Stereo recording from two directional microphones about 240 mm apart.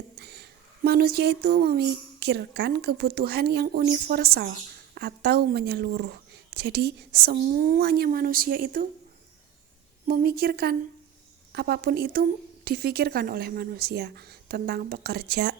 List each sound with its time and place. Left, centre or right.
0.2 s a sound: right
0.9 s speech: right
10.1 s speech: right